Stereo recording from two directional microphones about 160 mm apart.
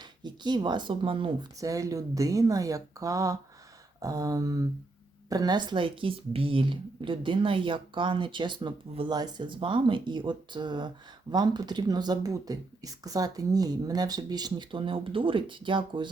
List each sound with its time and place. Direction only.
0.0 s a woman's voice: 25° right (ahead or behind)
1.5 s a woman's voice: 20° right (ahead or behind)